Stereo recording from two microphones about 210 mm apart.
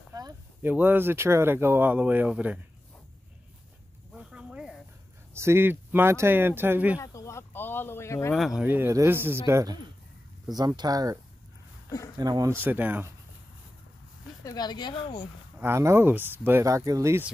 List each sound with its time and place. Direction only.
0.1 s speech: 15° right (ahead or behind)
4.1 s a sound: 5° right (ahead or behind)
5.3 s speech: 10° right (ahead or behind)
7.0 s a sound: 15° left (ahead or behind)
8.4 s speech: 5° right (ahead or behind)
12.2 s speech: 15° right (ahead or behind)
14.4 s speech: 20° left (ahead or behind)
15.6 s speech: 10° right (ahead or behind)